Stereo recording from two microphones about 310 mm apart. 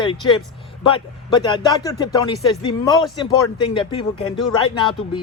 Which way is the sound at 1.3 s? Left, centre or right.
Centre.